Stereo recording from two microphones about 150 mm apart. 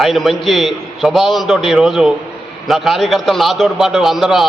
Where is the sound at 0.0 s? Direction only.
Centre (ahead or behind).